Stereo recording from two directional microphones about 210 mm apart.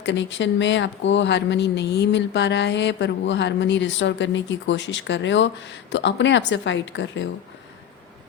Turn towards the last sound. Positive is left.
turn(degrees=60)  # may be behind; listen again after turning